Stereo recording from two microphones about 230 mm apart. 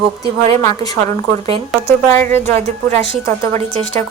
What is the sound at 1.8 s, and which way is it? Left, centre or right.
Speech, centre.